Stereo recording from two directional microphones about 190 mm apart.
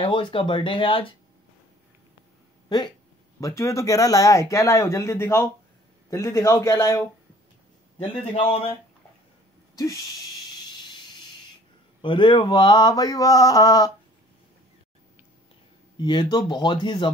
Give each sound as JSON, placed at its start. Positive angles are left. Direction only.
{"t": 0.0, "sound": "mantra", "side_deg": 25}
{"t": 3.3, "sound": "speech", "side_deg": 15}
{"t": 8.0, "sound": "a man's voice", "side_deg": 30}
{"t": 12.0, "sound": "mantra", "side_deg": 25}
{"t": 16.0, "sound": "mantra", "side_deg": 25}